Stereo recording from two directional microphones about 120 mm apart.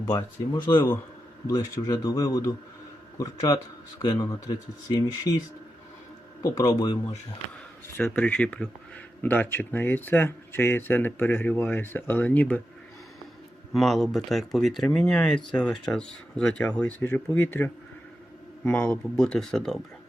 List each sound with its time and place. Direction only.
1.5 s a man's voice: 30° left (ahead or behind)
6.4 s speech: 30° left (ahead or behind)
7.9 s speech: 15° left (ahead or behind)
13.7 s speech: centre (ahead or behind)
17.0 s a man's voice: 20° left (ahead or behind); by 19.8 s 5° left (ahead or behind)